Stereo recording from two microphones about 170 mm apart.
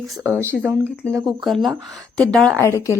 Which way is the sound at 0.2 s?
15° right (ahead or behind).